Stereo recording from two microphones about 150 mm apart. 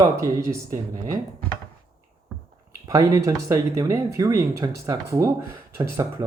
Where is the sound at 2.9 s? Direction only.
25° right (ahead or behind).